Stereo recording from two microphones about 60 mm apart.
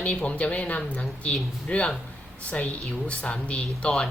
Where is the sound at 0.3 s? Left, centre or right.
Left.